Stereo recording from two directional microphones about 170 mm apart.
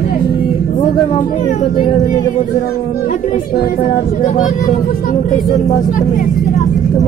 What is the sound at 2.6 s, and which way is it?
Speech, 55° left (ahead or behind).